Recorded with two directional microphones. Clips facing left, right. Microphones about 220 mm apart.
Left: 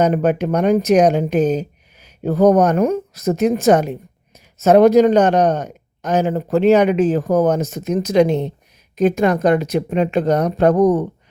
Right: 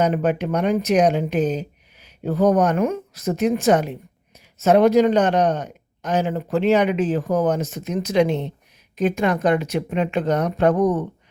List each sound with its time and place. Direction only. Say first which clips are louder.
0.0 s speech: left 4 dB; 45° left (ahead or behind)